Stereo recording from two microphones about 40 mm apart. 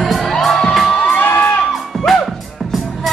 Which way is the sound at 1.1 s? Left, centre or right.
Left.